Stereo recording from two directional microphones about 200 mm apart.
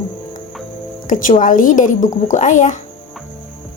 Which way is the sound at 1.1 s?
40° left (ahead or behind).